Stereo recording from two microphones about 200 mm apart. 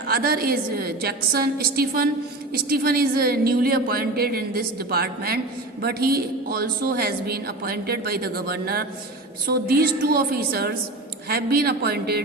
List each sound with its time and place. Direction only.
0.1 s a woman's voice: 50° right (ahead or behind)